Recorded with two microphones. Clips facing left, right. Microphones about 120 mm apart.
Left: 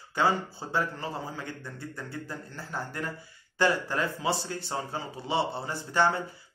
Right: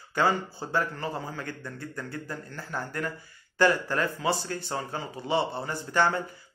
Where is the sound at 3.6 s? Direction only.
20° left (ahead or behind).